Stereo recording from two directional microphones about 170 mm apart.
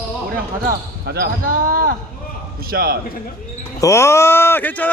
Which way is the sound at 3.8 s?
15° left (ahead or behind).